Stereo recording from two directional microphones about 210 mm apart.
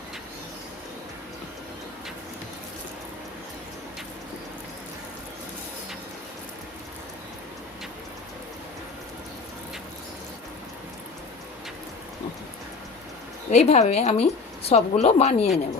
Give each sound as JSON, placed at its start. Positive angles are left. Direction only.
{"t": 13.5, "sound": "a woman's voice", "side_deg": 30}